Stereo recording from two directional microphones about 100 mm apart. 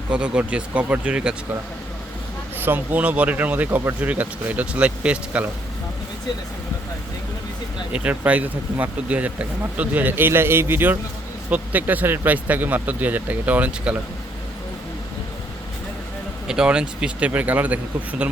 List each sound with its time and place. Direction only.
0.1 s speech: 10° right (ahead or behind)
2.6 s speech: 20° right (ahead or behind)
7.9 s speech: 15° right (ahead or behind)
16.5 s speech: 10° right (ahead or behind)